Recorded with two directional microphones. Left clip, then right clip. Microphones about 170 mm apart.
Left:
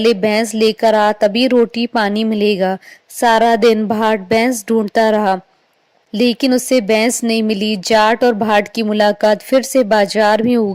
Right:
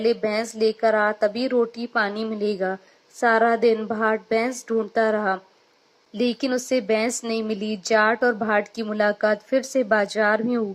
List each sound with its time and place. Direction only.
0.0 s a woman's voice: 35° left (ahead or behind)
6.4 s speech: 30° left (ahead or behind)